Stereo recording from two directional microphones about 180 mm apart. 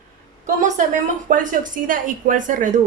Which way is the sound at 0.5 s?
45° right (ahead or behind).